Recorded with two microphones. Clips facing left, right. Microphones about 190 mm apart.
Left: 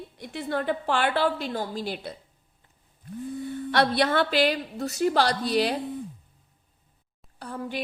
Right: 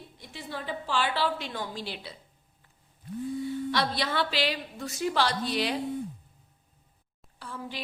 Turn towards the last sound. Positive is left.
turn(degrees=45)  # may be behind; listen again after turning